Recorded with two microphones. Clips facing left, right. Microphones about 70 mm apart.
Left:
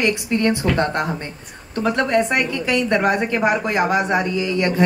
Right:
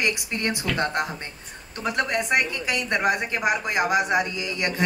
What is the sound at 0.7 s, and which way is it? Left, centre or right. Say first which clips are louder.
Speech: left 5 dB; left.